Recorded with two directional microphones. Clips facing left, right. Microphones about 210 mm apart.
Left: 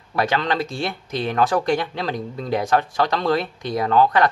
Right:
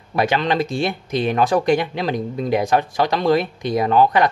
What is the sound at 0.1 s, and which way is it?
Speech, 15° right (ahead or behind).